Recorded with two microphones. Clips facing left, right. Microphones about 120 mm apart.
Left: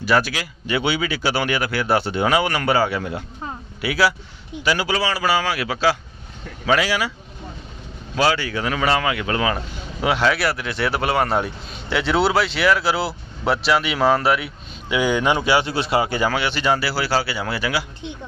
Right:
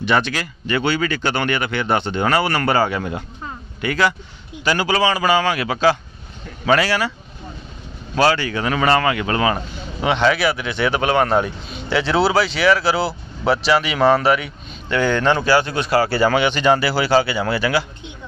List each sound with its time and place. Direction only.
0.0 s speech: 5° left (ahead or behind)
8.1 s speech: 10° left (ahead or behind)
15.4 s speech: 25° left (ahead or behind)
16.3 s speech: 5° left (ahead or behind)